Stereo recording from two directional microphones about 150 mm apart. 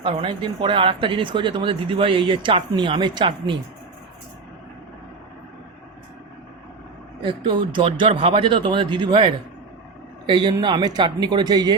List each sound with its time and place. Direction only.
0.0 s speech: 35° right (ahead or behind)
7.2 s speech: 30° right (ahead or behind)